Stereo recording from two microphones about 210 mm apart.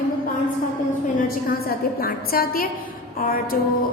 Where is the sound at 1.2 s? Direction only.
45° left (ahead or behind).